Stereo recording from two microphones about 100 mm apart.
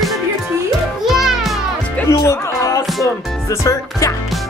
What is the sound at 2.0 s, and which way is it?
Music, 30° left (ahead or behind).